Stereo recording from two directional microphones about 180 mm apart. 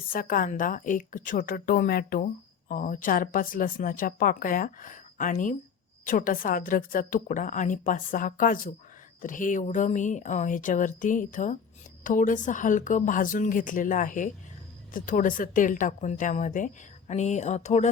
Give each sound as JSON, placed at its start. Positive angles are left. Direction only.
{"t": 0.1, "sound": "speech", "side_deg": 50}